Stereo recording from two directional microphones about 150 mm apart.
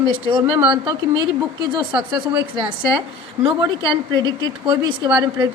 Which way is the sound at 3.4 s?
30° right (ahead or behind).